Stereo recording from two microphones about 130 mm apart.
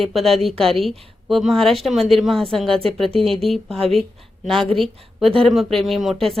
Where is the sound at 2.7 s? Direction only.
45° right (ahead or behind).